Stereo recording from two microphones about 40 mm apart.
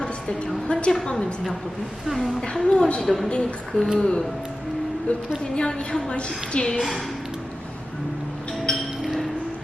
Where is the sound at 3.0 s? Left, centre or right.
Centre.